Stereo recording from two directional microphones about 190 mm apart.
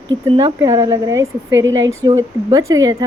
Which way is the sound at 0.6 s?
15° right (ahead or behind).